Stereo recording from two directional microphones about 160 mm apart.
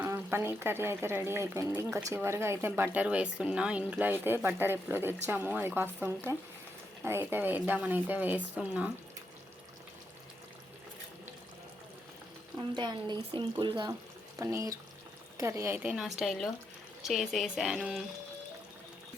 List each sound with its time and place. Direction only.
0.0 s speech: 15° right (ahead or behind)
12.5 s speech: 25° right (ahead or behind); by 18.0 s 5° right (ahead or behind)